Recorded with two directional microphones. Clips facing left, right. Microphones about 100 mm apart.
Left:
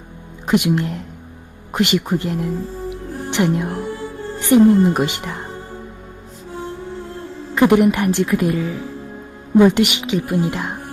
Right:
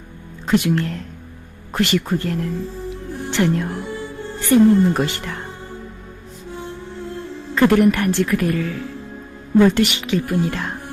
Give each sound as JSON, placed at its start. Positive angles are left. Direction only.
{"t": 0.4, "sound": "a woman's voice", "side_deg": 15}
{"t": 2.9, "sound": "music", "side_deg": 20}
{"t": 4.4, "sound": "a woman's voice", "side_deg": 15}
{"t": 7.5, "sound": "a woman's voice", "side_deg": 15}